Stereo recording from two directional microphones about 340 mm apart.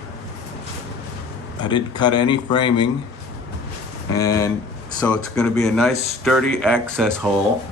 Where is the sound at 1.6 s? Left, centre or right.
Centre.